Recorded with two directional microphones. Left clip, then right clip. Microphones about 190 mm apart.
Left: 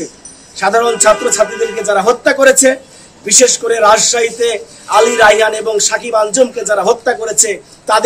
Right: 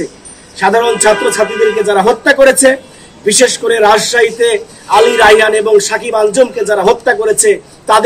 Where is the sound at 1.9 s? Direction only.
20° left (ahead or behind).